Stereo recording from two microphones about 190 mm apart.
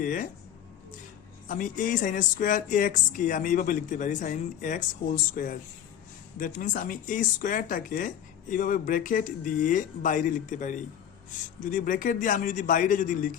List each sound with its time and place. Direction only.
0.0 s speech: 45° left (ahead or behind)
1.5 s speech: 45° left (ahead or behind)